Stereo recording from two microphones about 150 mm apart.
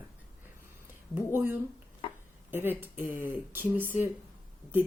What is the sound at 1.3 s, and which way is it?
Speech, 10° right (ahead or behind).